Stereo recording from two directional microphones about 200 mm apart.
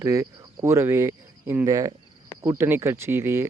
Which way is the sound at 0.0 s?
15° right (ahead or behind).